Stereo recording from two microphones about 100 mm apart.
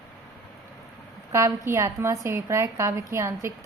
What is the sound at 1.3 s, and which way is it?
A woman's voice, 30° right (ahead or behind).